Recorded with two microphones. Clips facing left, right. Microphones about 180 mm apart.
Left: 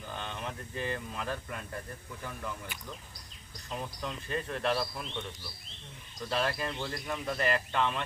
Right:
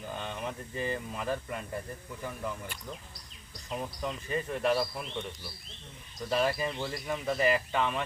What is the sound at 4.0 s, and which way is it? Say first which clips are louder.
Speech: right 3 dB; 5° right (ahead or behind).